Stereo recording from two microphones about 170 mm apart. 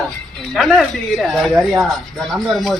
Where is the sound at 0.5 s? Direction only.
Centre (ahead or behind).